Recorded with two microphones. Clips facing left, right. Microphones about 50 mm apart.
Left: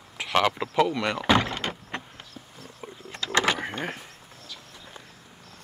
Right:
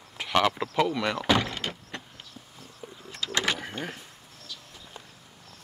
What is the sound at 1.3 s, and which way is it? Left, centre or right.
Door, left.